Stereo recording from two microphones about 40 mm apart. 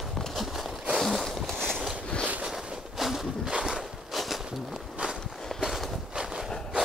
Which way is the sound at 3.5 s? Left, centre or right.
Centre.